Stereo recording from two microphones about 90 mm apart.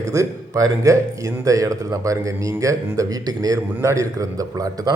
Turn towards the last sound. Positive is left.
turn(degrees=-40)  # may be behind; listen again after turning